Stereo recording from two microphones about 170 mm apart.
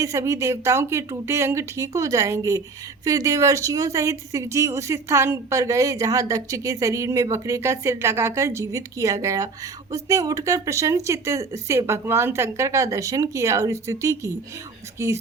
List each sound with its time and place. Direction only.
0.0 s speech: 20° right (ahead or behind)